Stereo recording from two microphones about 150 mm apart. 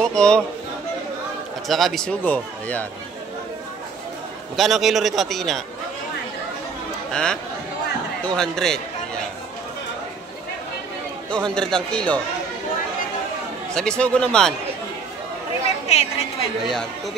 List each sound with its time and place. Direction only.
0.0 s a man's voice: 5° left (ahead or behind)
1.7 s speech: centre (ahead or behind)
4.6 s a man's voice: centre (ahead or behind)
7.1 s a man's voice: 5° left (ahead or behind)
11.2 s speech: 5° left (ahead or behind)
13.7 s speech: 5° left (ahead or behind)
15.9 s a woman's voice: 45° left (ahead or behind)